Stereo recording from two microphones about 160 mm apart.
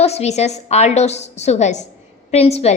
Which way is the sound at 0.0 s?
40° left (ahead or behind).